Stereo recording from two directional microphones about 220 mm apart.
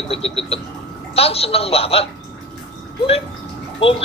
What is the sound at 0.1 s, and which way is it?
Speech, 25° left (ahead or behind).